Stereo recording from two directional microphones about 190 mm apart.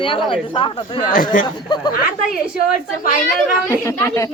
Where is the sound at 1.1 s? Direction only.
45° left (ahead or behind).